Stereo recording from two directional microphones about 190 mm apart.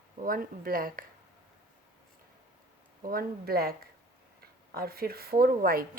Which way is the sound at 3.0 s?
50° right (ahead or behind).